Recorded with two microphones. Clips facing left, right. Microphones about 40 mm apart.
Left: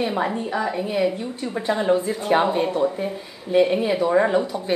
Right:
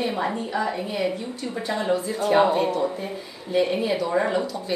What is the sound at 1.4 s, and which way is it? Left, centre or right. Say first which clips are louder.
A woman's voice: left 5 dB; left.